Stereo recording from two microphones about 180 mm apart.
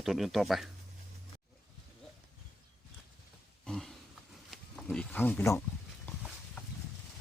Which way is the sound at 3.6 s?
5° left (ahead or behind).